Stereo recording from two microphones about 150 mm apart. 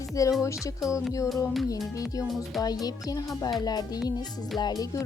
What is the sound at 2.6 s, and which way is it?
Speech, 25° left (ahead or behind).